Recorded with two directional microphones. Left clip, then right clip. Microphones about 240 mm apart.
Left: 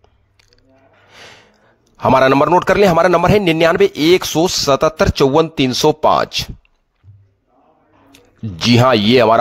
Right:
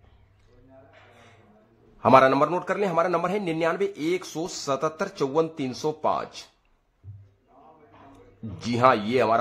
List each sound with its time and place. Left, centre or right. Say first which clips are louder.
2.0 s speech: left 6 dB; left
8.5 s speech: left 8 dB; left